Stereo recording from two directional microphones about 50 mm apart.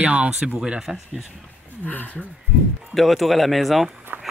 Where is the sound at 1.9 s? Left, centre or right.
Left.